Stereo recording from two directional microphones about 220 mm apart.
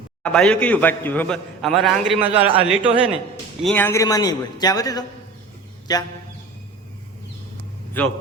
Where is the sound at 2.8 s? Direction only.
25° right (ahead or behind).